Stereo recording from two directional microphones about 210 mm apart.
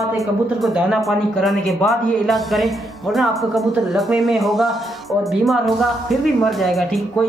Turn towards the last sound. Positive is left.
turn(degrees=0)  # may be behind; listen again after turning